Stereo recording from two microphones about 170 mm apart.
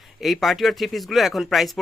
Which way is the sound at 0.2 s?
Centre (ahead or behind).